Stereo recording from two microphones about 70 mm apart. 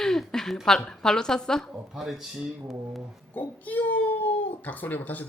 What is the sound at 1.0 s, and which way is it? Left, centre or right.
Speech, centre.